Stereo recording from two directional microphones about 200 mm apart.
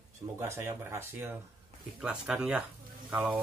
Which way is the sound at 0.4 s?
15° right (ahead or behind).